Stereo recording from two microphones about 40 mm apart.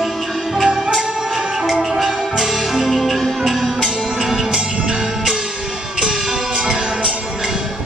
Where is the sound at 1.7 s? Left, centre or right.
Centre.